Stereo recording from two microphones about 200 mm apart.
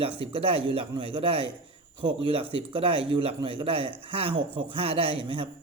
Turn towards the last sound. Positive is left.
turn(degrees=-25)  # may be behind; listen again after turning